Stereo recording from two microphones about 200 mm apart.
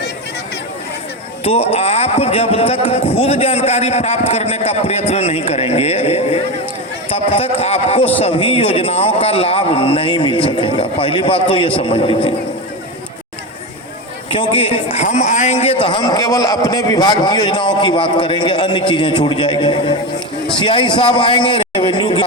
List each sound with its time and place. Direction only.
1.5 s a man's voice: 30° left (ahead or behind)
14.3 s a man's voice: 25° left (ahead or behind)